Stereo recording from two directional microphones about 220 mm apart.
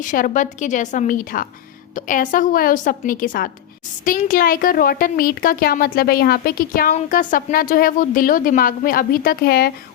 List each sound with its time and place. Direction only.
0.0 s a woman's voice: 35° left (ahead or behind)